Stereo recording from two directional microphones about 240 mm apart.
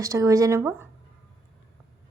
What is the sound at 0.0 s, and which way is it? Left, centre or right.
Speech, centre.